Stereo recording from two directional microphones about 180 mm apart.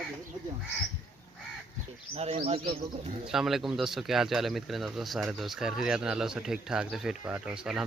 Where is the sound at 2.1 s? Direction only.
35° right (ahead or behind).